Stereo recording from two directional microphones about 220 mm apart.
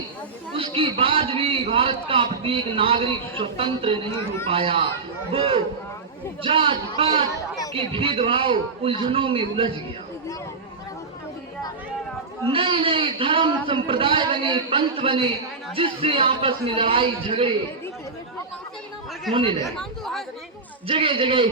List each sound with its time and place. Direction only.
0.5 s a man's voice: 25° right (ahead or behind)
6.4 s a man's voice: 25° right (ahead or behind)
12.5 s a man's voice: 25° right (ahead or behind)
19.3 s a man's voice: 25° right (ahead or behind)
19.8 s speech: centre (ahead or behind)
20.8 s a man's voice: 25° right (ahead or behind)